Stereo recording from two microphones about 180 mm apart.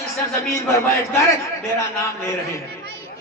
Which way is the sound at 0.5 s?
15° left (ahead or behind).